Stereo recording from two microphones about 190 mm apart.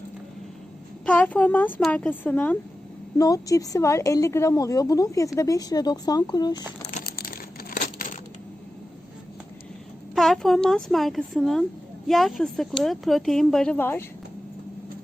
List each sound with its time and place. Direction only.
1.0 s a woman's voice: 10° left (ahead or behind)
6.9 s crumpling: 50° left (ahead or behind)
10.2 s speech: centre (ahead or behind)